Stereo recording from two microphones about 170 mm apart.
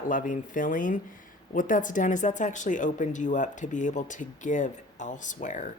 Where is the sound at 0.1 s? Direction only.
50° left (ahead or behind).